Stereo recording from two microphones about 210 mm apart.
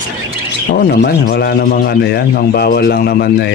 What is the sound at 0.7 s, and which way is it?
Speech, 50° left (ahead or behind).